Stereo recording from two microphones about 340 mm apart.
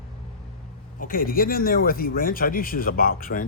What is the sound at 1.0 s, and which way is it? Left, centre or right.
Speech, left.